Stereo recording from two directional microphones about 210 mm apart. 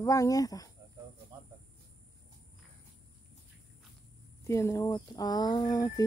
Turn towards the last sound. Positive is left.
turn(degrees=15)  # may be behind; listen again after turning